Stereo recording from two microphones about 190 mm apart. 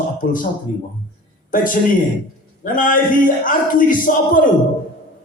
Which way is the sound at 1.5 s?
45° left (ahead or behind).